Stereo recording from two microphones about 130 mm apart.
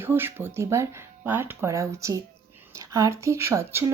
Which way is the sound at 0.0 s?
15° right (ahead or behind).